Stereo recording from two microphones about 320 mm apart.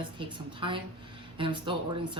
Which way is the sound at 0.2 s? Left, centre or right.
Centre.